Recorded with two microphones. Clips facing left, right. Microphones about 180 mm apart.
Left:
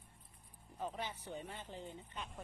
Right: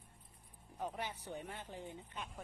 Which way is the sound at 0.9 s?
10° right (ahead or behind).